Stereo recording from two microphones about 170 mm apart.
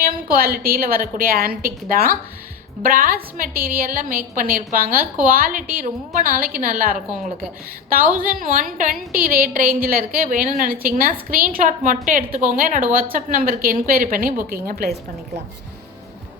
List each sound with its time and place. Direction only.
0.0 s a woman's voice: 60° right (ahead or behind)